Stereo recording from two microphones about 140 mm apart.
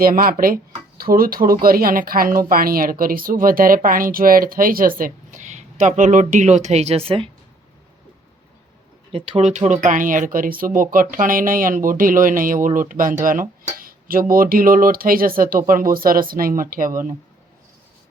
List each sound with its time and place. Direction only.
0.0 s a woman's voice: 90° right; by 7.3 s 40° right (ahead or behind)
9.1 s speech: 40° right (ahead or behind)
9.6 s speech: 60° right (ahead or behind); by 17.2 s 80° right